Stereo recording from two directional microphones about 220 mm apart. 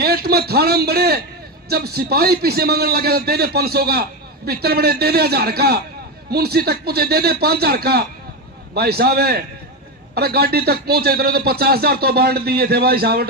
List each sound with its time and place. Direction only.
0.0 s speech: 45° right (ahead or behind)